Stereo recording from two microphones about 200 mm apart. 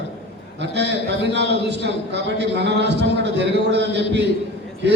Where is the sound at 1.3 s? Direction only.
60° right (ahead or behind).